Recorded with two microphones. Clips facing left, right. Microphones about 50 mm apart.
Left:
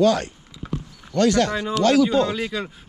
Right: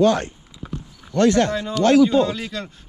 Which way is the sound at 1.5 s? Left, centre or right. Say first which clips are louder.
Right 2 dB; centre.